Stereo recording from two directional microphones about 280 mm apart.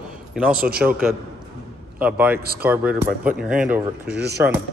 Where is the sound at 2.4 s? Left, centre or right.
Right.